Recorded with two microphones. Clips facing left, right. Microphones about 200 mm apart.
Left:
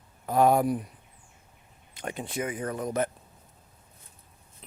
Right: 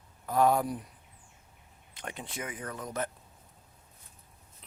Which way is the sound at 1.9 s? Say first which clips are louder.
Left 6 dB; 5° left (ahead or behind).